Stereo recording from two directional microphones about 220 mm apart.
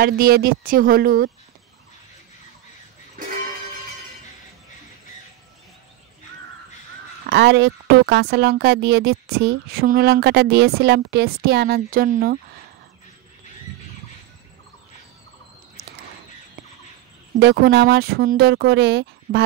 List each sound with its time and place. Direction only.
0.0 s speech: 45° right (ahead or behind)
7.2 s speech: 50° right (ahead or behind)
17.4 s speech: 50° right (ahead or behind)